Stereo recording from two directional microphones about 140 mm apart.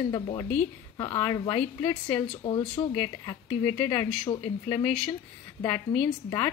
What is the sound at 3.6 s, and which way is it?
A woman's voice, 20° left (ahead or behind).